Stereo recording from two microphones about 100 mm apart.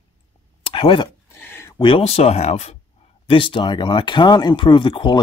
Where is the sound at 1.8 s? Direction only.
60° left (ahead or behind); by 2.8 s 90° left.